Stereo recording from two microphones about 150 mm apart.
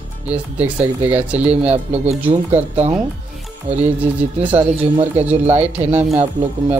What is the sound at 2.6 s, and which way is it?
Speech, 45° right (ahead or behind).